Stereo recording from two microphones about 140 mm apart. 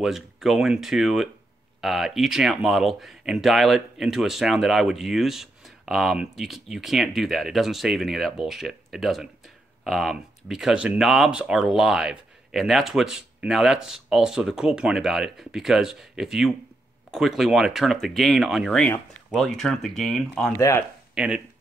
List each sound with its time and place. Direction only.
0.0 s speech: centre (ahead or behind)
20.5 s speech: 20° left (ahead or behind)
21.1 s a sound: 5° right (ahead or behind)